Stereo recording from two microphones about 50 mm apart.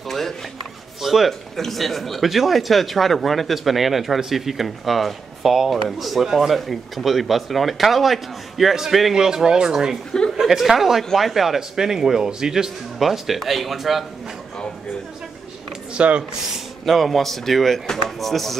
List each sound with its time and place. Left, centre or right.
1.0 s a man's voice: centre
15.9 s speech: right
16.5 s a man's voice: centre